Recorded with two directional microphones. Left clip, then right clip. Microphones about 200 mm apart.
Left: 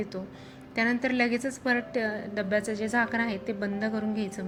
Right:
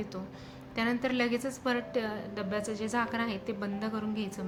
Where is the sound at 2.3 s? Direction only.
20° left (ahead or behind).